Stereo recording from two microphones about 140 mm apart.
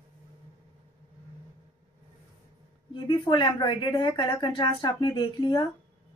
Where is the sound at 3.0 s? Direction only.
35° left (ahead or behind).